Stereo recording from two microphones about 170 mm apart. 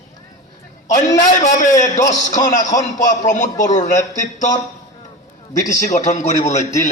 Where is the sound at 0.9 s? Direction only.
45° left (ahead or behind).